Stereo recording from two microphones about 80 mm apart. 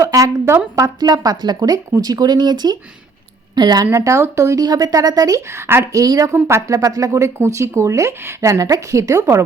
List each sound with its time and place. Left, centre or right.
0.0 s a sound: right
0.9 s a woman's voice: right
3.9 s speech: right
5.5 s speech: right
5.9 s speech: right